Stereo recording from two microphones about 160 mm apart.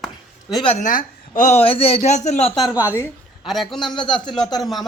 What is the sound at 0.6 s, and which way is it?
Speech, 50° left (ahead or behind).